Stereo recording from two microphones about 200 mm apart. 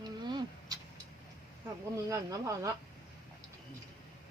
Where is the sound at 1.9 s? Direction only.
15° right (ahead or behind).